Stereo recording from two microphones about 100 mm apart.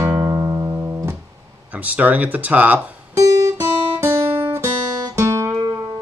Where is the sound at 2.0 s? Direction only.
15° right (ahead or behind).